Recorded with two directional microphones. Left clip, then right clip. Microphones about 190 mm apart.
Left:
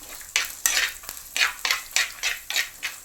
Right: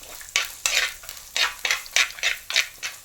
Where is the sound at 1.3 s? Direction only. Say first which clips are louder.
Even; 20° right (ahead or behind).